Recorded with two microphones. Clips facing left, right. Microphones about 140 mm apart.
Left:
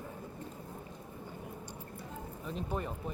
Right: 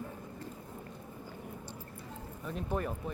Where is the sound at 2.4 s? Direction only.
5° right (ahead or behind).